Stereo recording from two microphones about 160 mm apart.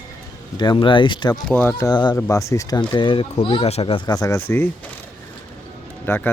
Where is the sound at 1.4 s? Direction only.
10° left (ahead or behind).